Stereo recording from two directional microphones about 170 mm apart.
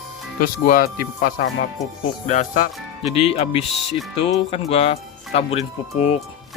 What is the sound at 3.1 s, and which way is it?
Speech, 35° left (ahead or behind).